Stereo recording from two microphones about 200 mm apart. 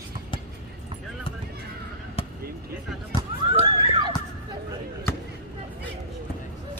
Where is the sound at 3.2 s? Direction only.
20° right (ahead or behind).